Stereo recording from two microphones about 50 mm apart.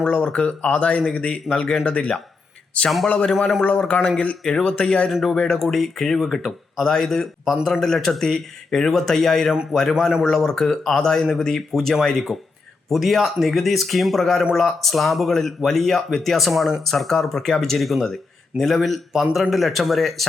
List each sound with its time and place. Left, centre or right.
0.2 s a man's voice: centre
3.3 s speech: centre
3.8 s a man's voice: left
4.4 s speech: centre